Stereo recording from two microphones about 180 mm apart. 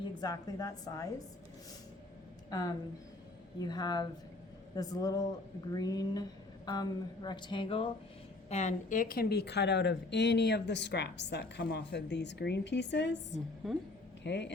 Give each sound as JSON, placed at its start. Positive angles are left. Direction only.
{"t": 0.2, "sound": "speech", "side_deg": 20}
{"t": 2.5, "sound": "a woman's voice", "side_deg": 20}
{"t": 13.6, "sound": "a woman's voice", "side_deg": 0}
{"t": 14.3, "sound": "a woman's voice", "side_deg": 75}